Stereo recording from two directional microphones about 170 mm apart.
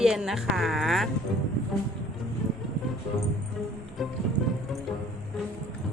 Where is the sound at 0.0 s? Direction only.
5° right (ahead or behind).